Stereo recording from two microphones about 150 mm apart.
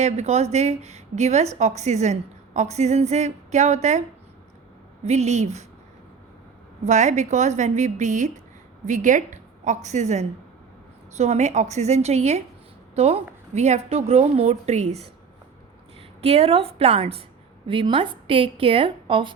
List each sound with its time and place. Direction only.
0.0 s a woman's voice: 45° right (ahead or behind)
5.0 s a woman's voice: 50° right (ahead or behind)
6.8 s a woman's voice: 50° right (ahead or behind)
16.2 s a woman's voice: 45° right (ahead or behind)